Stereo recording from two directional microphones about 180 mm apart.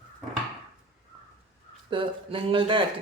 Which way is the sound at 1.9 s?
30° right (ahead or behind).